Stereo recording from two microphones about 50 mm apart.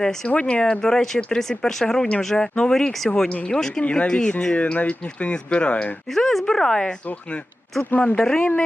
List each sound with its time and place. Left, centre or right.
0.0 s speech: centre
0.3 s speech: left
0.6 s speech: centre
3.2 s speech: left
3.5 s speech: centre
4.5 s speech: left
6.1 s speech: centre
7.9 s speech: left